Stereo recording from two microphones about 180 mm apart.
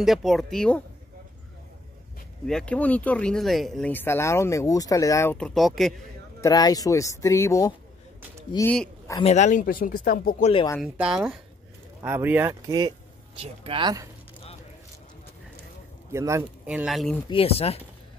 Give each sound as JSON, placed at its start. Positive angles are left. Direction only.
{"t": 0.0, "sound": "speech", "side_deg": 0}
{"t": 2.4, "sound": "speech", "side_deg": 5}
{"t": 6.4, "sound": "speech", "side_deg": 20}
{"t": 9.2, "sound": "speech", "side_deg": 40}
{"t": 10.8, "sound": "speech", "side_deg": -5}
{"t": 13.4, "sound": "speech", "side_deg": -30}
{"t": 16.1, "sound": "speech", "side_deg": -15}
{"t": 17.3, "sound": "speech", "side_deg": 30}